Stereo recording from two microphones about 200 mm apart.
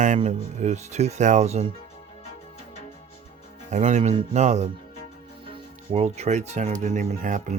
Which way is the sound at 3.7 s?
35° right (ahead or behind).